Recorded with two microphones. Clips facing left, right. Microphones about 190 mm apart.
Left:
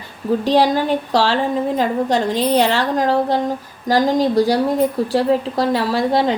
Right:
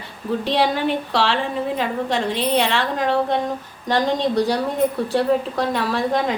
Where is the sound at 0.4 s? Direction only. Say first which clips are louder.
Left 4 dB; 40° left (ahead or behind).